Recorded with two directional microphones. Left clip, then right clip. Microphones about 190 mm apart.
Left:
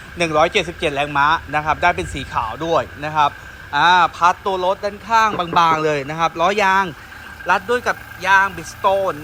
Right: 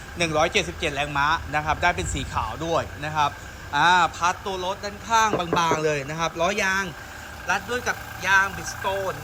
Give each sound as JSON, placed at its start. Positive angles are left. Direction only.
{"t": 0.2, "sound": "speech", "side_deg": -5}